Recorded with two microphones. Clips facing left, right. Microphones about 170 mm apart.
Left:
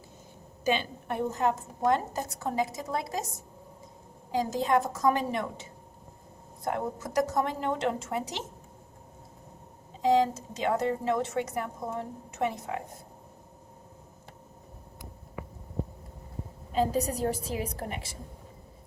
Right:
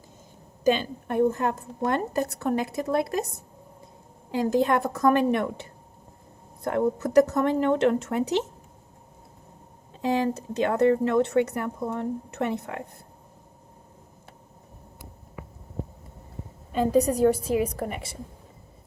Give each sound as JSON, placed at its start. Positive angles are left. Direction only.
{"t": 0.6, "sound": "speech", "side_deg": -45}
{"t": 6.7, "sound": "speech", "side_deg": -60}
{"t": 10.0, "sound": "speech", "side_deg": -60}
{"t": 16.9, "sound": "speech", "side_deg": -55}